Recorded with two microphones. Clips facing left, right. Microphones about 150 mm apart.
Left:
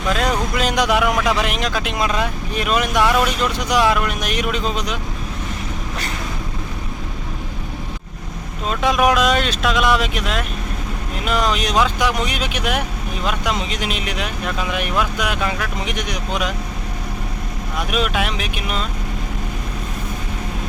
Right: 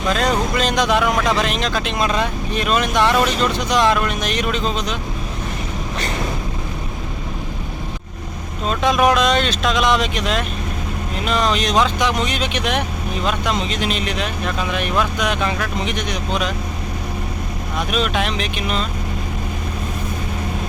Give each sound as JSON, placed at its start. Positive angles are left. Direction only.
{"t": 0.1, "sound": "speech", "side_deg": 5}
{"t": 8.7, "sound": "speech", "side_deg": 5}
{"t": 17.7, "sound": "speech", "side_deg": 10}